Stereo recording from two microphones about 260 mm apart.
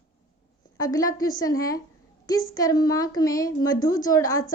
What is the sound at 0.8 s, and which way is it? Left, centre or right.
A woman's voice, centre.